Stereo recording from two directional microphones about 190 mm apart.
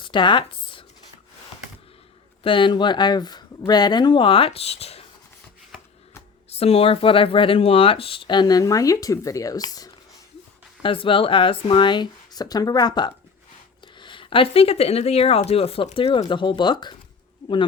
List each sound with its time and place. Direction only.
0.0 s a sound: 25° left (ahead or behind)
2.4 s speech: 25° left (ahead or behind)
6.5 s speech: 30° left (ahead or behind)